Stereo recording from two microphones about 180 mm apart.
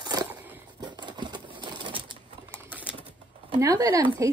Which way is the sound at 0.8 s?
25° right (ahead or behind).